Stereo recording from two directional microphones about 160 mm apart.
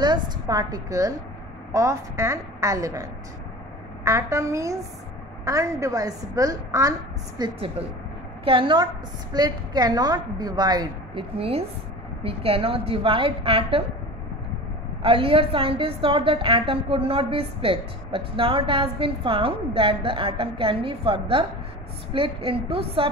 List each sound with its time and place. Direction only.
0.0 s a woman's voice: 25° right (ahead or behind)
11.3 s a woman's voice: 40° right (ahead or behind)
15.0 s a woman's voice: 35° right (ahead or behind)